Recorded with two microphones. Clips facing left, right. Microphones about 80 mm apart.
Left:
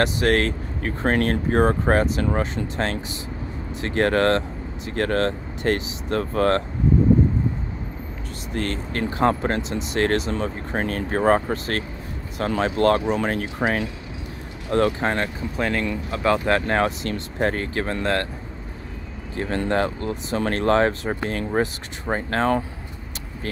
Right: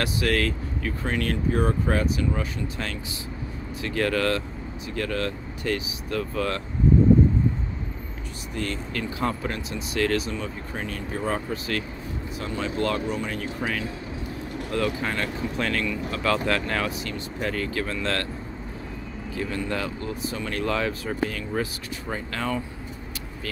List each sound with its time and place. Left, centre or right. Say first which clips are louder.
0.0 s speech: left 5 dB; left
1.0 s speech: left 6 dB; left
2.1 s speech: left 4 dB; left
3.8 s speech: left 5 dB; left
8.5 s speech: left 4 dB; left
12.4 s speech: left 7 dB; left
15.5 s speech: left 4 dB; left
19.3 s speech: left 6 dB; left